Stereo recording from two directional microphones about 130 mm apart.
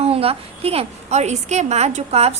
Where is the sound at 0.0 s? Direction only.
50° right (ahead or behind).